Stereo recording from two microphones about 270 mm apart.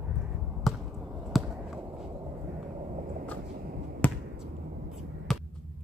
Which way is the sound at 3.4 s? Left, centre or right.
Right.